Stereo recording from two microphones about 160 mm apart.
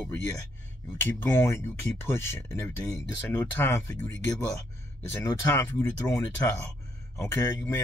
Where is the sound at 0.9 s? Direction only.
10° left (ahead or behind).